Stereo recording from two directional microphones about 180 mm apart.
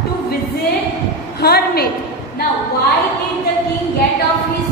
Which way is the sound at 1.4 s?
60° left (ahead or behind).